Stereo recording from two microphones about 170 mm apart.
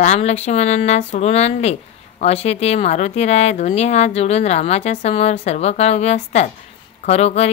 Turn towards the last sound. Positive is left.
turn(degrees=40)  # may be behind; listen again after turning